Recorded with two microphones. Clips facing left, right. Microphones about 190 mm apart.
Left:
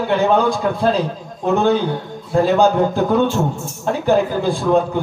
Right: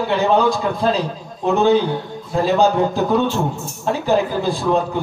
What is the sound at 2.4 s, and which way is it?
A man's voice, 50° left (ahead or behind).